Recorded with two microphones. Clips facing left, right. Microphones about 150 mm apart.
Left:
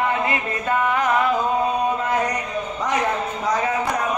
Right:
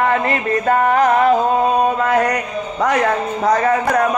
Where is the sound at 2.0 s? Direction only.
65° right (ahead or behind).